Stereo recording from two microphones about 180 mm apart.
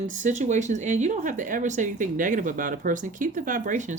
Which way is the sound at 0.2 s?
40° right (ahead or behind).